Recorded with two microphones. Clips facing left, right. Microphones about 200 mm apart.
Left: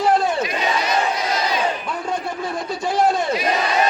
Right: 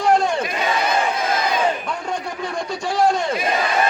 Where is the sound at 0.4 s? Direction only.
55° right (ahead or behind).